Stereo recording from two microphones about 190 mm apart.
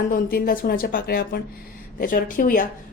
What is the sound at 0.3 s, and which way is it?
A woman's voice, 50° left (ahead or behind).